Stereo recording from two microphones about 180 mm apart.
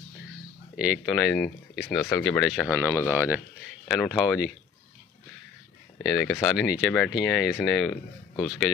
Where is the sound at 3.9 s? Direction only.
5° right (ahead or behind).